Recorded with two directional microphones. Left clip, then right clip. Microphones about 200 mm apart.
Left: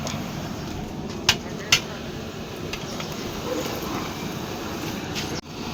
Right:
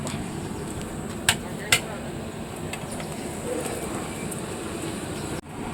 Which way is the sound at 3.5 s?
45° left (ahead or behind).